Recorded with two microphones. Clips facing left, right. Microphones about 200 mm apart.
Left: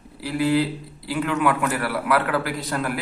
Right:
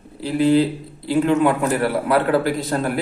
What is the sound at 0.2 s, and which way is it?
A man's voice, 25° right (ahead or behind).